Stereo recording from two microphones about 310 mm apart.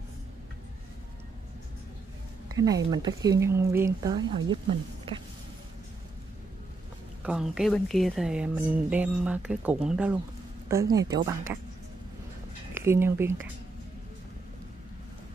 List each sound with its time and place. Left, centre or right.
2.5 s speech: centre
7.2 s speech: centre
12.7 s speech: centre